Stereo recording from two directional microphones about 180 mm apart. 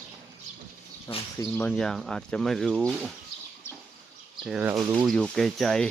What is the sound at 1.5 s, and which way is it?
Speech, 5° left (ahead or behind).